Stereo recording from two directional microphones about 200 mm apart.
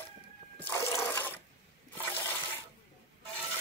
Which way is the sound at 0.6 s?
15° left (ahead or behind).